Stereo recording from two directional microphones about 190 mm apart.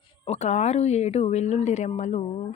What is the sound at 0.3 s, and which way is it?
Speech, 35° left (ahead or behind).